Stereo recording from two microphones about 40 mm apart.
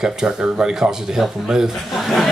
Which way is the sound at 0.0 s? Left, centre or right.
Centre.